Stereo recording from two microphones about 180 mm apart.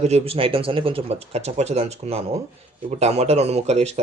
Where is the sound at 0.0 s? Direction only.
35° right (ahead or behind).